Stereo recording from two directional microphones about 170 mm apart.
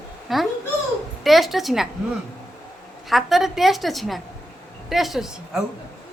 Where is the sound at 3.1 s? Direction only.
Centre (ahead or behind).